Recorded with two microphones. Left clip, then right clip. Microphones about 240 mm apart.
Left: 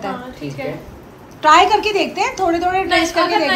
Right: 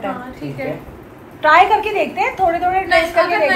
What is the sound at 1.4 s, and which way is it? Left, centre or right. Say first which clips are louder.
A woman's voice: even; centre.